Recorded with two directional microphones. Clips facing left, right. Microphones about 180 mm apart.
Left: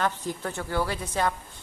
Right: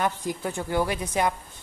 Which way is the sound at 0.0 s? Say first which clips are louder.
Right 2 dB; 10° right (ahead or behind).